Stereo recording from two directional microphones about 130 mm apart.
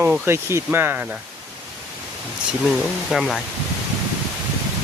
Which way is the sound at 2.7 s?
Centre (ahead or behind).